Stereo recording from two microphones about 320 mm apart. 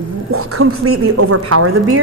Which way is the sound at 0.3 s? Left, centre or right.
Right.